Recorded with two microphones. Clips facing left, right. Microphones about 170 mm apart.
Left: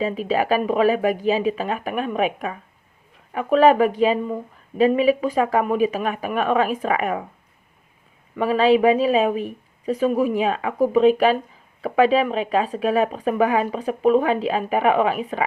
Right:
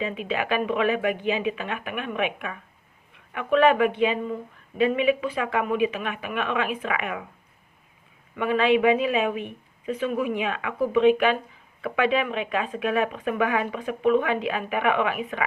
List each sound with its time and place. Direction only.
0.0 s speech: 35° left (ahead or behind)
8.4 s speech: 35° left (ahead or behind)